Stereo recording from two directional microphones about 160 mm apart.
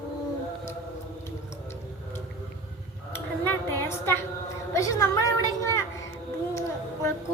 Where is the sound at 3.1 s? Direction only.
15° left (ahead or behind).